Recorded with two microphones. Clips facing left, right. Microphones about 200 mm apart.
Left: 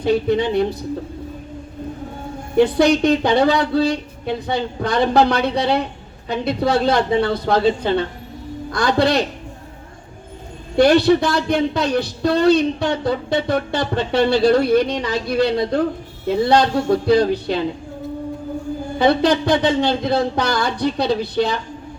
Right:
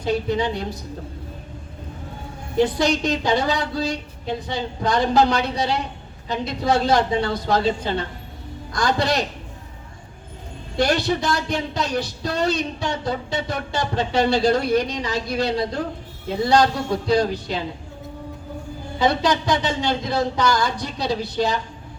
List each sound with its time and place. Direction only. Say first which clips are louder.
0.0 s speech: left 5 dB; 60° left (ahead or behind)
2.6 s speech: left 5 dB; 60° left (ahead or behind)
10.8 s speech: left 8 dB; 60° left (ahead or behind)
18.9 s speech: left 4 dB; 60° left (ahead or behind)